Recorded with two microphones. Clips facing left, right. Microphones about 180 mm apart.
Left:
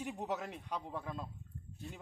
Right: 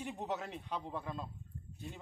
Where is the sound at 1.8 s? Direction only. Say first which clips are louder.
Right 1 dB; 15° right (ahead or behind).